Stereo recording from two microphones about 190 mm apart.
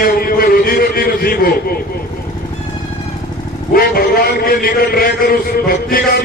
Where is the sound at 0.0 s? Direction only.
50° left (ahead or behind).